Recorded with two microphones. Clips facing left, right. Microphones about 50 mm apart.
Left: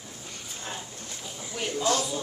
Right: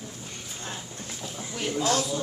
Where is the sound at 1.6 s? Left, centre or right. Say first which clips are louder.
Right 2 dB; centre.